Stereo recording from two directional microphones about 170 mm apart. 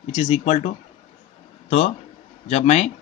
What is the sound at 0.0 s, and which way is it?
Speech, 40° left (ahead or behind).